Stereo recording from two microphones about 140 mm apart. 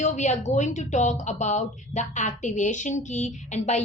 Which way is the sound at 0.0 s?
60° left (ahead or behind).